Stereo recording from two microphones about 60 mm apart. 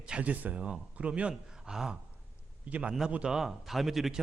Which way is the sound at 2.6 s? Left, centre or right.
Right.